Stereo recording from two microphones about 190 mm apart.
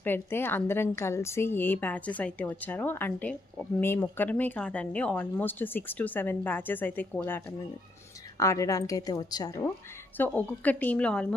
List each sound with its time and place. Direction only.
0.0 s speech: 10° left (ahead or behind)
10.2 s speech: 10° left (ahead or behind)